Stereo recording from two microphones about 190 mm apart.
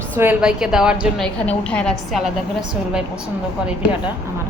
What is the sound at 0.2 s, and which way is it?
A woman's voice, 5° right (ahead or behind).